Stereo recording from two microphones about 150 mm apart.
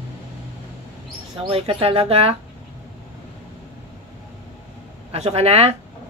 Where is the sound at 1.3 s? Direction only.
40° right (ahead or behind).